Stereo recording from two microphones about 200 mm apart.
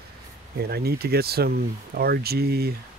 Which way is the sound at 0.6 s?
50° right (ahead or behind).